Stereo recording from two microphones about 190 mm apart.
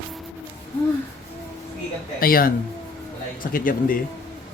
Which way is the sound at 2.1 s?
50° left (ahead or behind).